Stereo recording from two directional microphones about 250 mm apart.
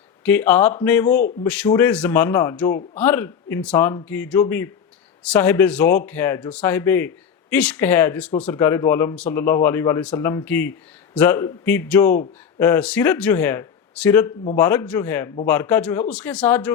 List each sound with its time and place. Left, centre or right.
0.2 s speech: centre